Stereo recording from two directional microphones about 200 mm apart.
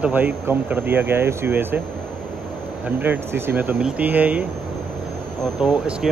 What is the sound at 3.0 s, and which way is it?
Speech, 10° right (ahead or behind).